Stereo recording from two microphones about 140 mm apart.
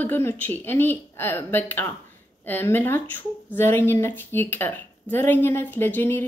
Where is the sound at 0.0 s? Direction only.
15° left (ahead or behind).